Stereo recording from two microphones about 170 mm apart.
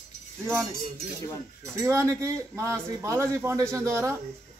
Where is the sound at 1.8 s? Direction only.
15° right (ahead or behind).